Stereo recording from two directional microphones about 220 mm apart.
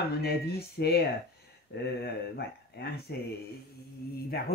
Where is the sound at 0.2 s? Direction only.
45° left (ahead or behind).